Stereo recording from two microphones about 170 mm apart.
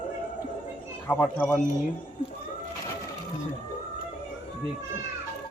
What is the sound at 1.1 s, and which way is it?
Speech, 10° left (ahead or behind).